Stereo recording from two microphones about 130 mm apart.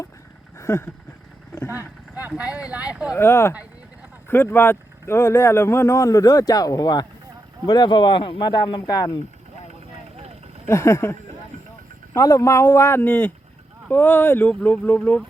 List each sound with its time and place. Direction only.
0.6 s a sound: 20° left (ahead or behind)
1.5 s speech: 20° left (ahead or behind)
2.1 s speech: 10° right (ahead or behind)
3.2 s speech: 20° left (ahead or behind)
10.7 s speech: 20° left (ahead or behind)